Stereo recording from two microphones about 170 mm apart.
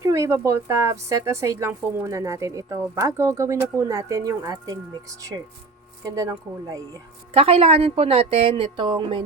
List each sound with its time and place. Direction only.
0.0 s a woman's voice: 15° right (ahead or behind)
7.3 s a woman's voice: 35° right (ahead or behind)